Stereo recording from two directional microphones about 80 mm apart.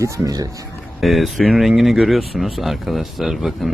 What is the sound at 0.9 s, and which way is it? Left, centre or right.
Speech, centre.